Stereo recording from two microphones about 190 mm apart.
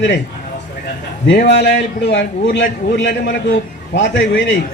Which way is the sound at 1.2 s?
70° left (ahead or behind).